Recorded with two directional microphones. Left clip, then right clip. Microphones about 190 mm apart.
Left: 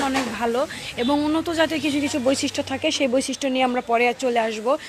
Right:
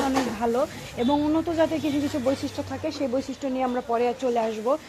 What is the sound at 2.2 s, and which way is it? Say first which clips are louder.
Speech: left 5 dB; 25° left (ahead or behind).